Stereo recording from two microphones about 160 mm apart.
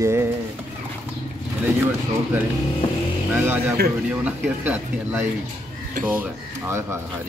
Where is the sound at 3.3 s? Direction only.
10° right (ahead or behind).